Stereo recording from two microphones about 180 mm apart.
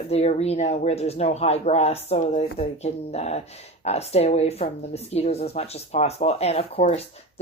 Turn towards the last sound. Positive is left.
turn(degrees=35)  # may be behind; listen again after turning